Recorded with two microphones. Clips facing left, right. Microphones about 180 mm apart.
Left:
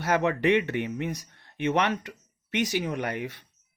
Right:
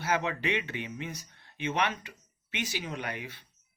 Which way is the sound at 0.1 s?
60° left (ahead or behind).